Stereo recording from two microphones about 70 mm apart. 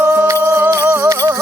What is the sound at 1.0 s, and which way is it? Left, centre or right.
Music, right.